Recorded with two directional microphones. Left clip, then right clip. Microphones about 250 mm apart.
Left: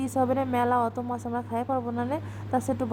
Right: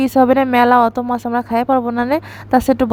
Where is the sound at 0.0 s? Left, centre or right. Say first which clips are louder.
Right 13 dB; right.